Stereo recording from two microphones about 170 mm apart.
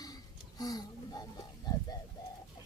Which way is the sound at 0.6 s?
20° left (ahead or behind).